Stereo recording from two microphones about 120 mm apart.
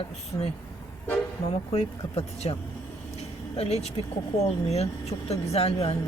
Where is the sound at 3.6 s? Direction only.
60° left (ahead or behind).